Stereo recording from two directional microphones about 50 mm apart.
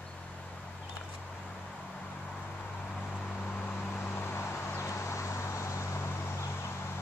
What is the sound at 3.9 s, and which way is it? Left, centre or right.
Vehicle, left.